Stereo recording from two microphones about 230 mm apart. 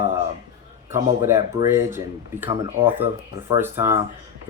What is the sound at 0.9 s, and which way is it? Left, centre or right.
Speech, centre.